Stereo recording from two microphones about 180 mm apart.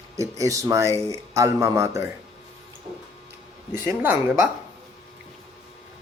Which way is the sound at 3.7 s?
10° right (ahead or behind).